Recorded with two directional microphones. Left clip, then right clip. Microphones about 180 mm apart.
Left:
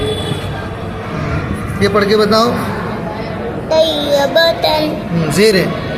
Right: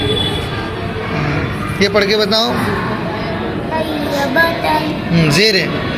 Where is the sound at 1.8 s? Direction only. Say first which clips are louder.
Left 1 dB; 10° right (ahead or behind).